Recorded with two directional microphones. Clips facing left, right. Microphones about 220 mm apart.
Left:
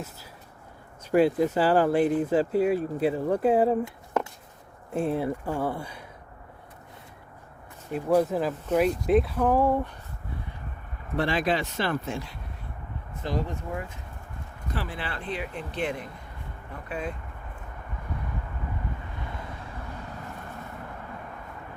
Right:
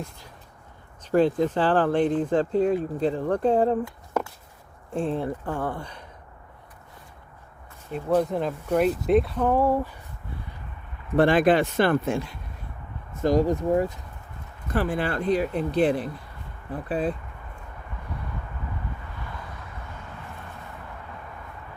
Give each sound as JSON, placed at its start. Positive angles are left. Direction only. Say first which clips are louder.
{"t": 1.1, "sound": "speech", "louder": "even", "side_deg": 10}
{"t": 4.9, "sound": "speech", "louder": "even", "side_deg": 5}
{"t": 7.9, "sound": "speech", "louder": "even", "side_deg": 5}
{"t": 11.2, "sound": "speech", "louder": "right 8 dB", "side_deg": -55}
{"t": 13.2, "sound": "speech", "louder": "right 10 dB", "side_deg": -40}
{"t": 14.7, "sound": "speech", "louder": "right 9 dB", "side_deg": -50}